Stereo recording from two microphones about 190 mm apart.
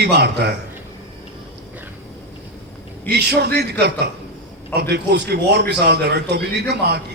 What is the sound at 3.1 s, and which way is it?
A man's voice, 60° right (ahead or behind).